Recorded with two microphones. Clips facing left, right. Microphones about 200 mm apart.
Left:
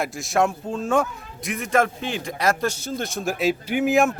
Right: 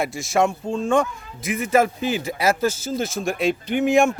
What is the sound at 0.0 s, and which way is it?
A man's voice, centre (ahead or behind).